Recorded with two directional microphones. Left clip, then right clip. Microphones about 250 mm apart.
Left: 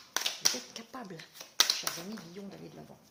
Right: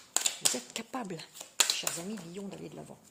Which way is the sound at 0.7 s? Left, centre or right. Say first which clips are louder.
Right 6 dB; right.